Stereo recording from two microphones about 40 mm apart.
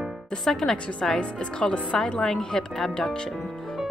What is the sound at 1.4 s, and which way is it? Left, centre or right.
Speech, left.